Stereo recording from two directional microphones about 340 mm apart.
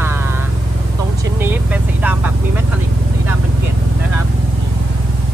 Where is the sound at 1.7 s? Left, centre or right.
Centre.